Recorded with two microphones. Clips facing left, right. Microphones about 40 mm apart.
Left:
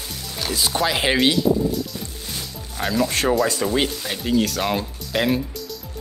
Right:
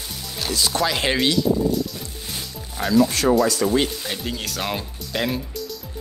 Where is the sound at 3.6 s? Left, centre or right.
Centre.